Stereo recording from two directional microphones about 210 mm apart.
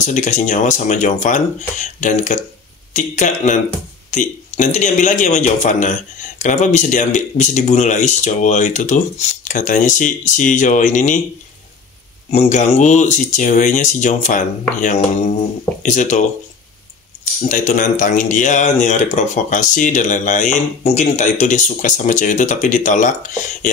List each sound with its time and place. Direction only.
0.0 s speech: 35° left (ahead or behind)
12.3 s speech: 35° left (ahead or behind)